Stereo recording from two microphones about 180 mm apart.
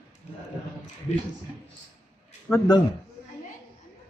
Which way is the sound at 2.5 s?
5° left (ahead or behind).